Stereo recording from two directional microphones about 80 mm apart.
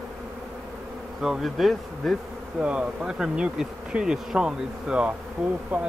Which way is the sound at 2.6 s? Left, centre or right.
Centre.